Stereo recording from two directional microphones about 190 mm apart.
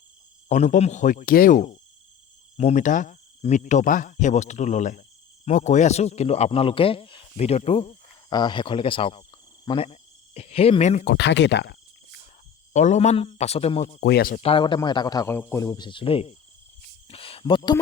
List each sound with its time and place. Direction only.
0.4 s speech: 40° left (ahead or behind)
8.3 s a man's voice: 20° left (ahead or behind)
11.0 s speech: 65° left (ahead or behind)
12.7 s speech: 40° left (ahead or behind)
14.0 s speech: 55° left (ahead or behind)
14.4 s a man's voice: 25° left (ahead or behind)